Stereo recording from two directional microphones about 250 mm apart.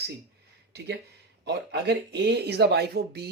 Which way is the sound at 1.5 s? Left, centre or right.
Right.